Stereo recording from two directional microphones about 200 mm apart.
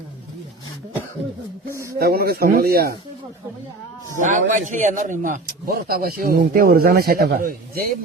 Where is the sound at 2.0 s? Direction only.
50° right (ahead or behind).